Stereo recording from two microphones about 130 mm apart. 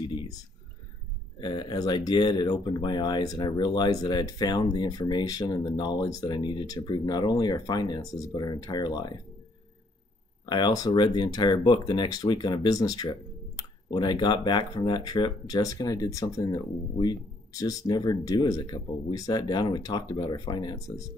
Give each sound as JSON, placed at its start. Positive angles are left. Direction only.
{"t": 1.4, "sound": "speech", "side_deg": 35}
{"t": 10.4, "sound": "speech", "side_deg": 35}